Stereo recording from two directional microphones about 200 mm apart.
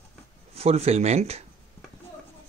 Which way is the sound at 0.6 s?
30° right (ahead or behind).